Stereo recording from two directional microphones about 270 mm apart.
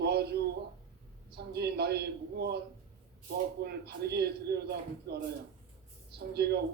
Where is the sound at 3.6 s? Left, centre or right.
Right.